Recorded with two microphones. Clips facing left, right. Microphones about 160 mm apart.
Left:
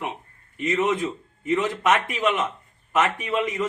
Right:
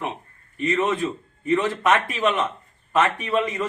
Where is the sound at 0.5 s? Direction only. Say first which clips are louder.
Even; 20° left (ahead or behind).